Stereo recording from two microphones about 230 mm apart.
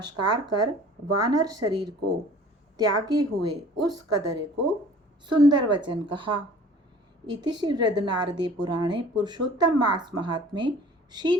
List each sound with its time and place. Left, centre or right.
0.0 s a woman's voice: centre